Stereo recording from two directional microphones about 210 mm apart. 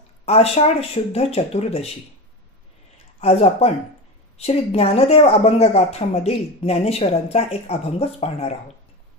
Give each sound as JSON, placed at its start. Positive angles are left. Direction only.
{"t": 0.2, "sound": "speech", "side_deg": 30}
{"t": 3.2, "sound": "speech", "side_deg": 30}